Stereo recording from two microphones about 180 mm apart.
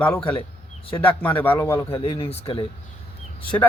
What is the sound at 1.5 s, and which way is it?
Speech, 15° left (ahead or behind).